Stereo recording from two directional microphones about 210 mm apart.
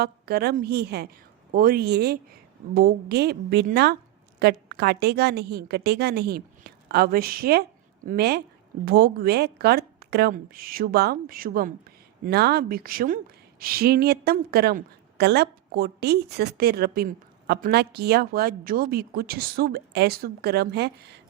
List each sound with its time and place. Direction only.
0.0 s speech: 50° right (ahead or behind)